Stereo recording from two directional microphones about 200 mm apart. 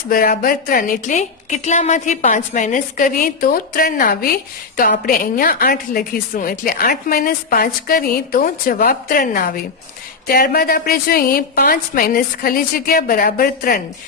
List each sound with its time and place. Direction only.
0.1 s a woman's voice: 45° left (ahead or behind)